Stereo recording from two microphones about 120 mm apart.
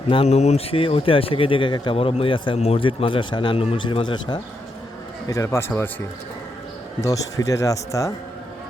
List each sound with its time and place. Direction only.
0.1 s speech: 55° left (ahead or behind)
2.6 s speech: 55° left (ahead or behind)
5.3 s a man's voice: 25° left (ahead or behind)
7.0 s a man's voice: 30° left (ahead or behind)